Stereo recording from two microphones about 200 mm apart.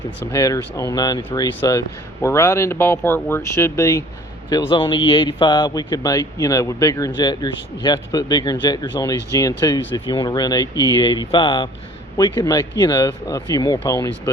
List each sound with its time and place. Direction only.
0.3 s speech: 15° left (ahead or behind)